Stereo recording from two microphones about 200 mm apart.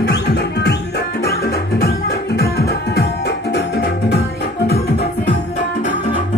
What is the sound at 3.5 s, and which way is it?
Music, 55° left (ahead or behind).